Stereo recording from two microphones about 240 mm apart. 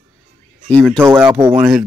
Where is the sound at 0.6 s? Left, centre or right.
Centre.